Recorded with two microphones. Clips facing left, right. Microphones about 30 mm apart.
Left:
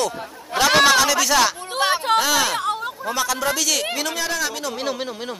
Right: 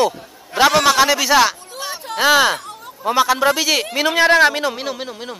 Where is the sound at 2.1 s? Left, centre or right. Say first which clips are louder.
Right 5 dB; right.